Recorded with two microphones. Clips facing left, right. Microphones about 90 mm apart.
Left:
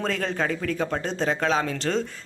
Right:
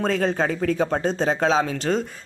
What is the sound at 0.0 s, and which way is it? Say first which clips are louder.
Speech: right 5 dB; 25° right (ahead or behind).